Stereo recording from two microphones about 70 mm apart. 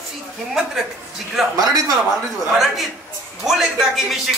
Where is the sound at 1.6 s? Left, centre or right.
Right.